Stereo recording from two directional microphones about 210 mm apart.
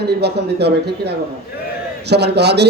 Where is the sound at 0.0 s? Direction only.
50° right (ahead or behind).